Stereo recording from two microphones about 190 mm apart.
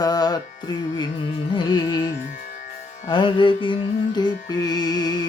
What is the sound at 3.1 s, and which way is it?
Music, 25° left (ahead or behind).